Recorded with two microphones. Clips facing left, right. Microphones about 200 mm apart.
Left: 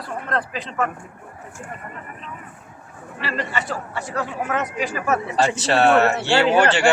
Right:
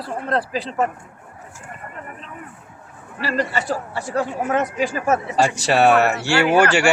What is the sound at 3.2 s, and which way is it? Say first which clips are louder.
Speech: right 4 dB; 40° right (ahead or behind).